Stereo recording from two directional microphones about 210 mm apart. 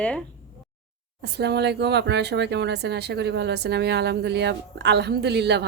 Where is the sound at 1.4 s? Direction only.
50° right (ahead or behind).